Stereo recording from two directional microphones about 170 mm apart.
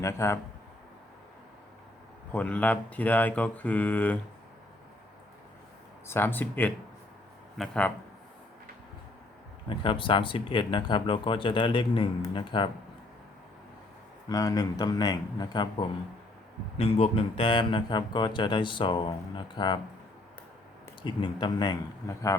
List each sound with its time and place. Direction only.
0.0 s speech: 15° left (ahead or behind)
2.3 s speech: 10° left (ahead or behind)
6.1 s speech: 15° left (ahead or behind)
9.6 s speech: 30° left (ahead or behind)
14.3 s speech: 20° left (ahead or behind)
21.0 s speech: 30° left (ahead or behind)